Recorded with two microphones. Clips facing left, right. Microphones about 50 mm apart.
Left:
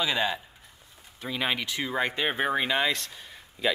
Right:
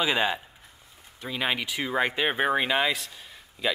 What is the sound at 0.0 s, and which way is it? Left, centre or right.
Speech, centre.